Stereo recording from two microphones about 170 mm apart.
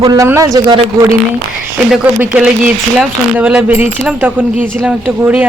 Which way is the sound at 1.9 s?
5° right (ahead or behind).